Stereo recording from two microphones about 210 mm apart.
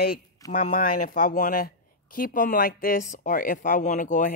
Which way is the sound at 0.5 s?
40° left (ahead or behind).